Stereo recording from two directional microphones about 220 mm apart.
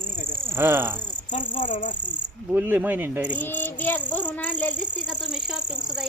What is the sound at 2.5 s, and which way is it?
Speech, 10° right (ahead or behind).